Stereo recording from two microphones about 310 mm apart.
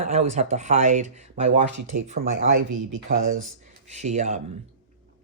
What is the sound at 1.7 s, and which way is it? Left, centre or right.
Speech, right.